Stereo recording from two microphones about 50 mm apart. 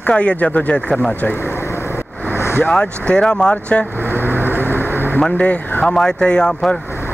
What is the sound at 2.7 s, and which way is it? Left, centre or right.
Speech, left.